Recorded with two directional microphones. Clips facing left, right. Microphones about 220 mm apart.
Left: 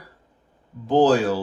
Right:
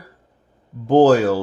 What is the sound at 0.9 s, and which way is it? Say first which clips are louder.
Speech: right 5 dB; 45° right (ahead or behind).